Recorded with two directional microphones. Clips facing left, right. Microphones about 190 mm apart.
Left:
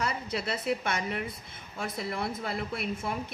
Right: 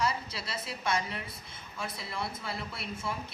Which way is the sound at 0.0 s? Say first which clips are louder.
Left 1 dB; 55° left (ahead or behind).